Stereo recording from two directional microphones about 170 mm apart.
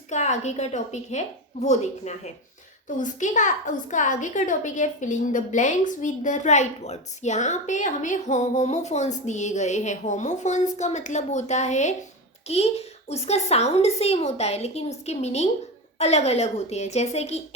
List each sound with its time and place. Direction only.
0.1 s a woman's voice: 45° left (ahead or behind)